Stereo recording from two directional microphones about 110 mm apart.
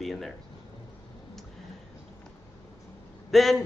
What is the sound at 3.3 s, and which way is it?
Speech, centre (ahead or behind).